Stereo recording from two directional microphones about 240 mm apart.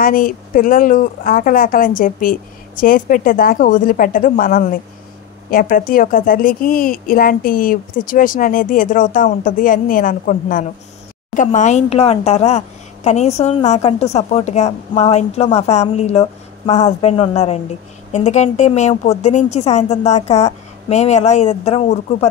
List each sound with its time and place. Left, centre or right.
0.0 s a woman's voice: left